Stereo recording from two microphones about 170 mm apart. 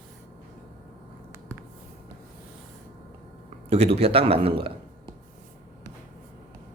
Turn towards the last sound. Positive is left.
turn(degrees=-30)  # may be behind; listen again after turning